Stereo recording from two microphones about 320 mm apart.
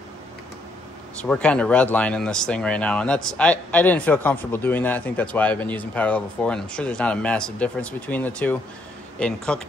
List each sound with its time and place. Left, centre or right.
1.2 s speech: centre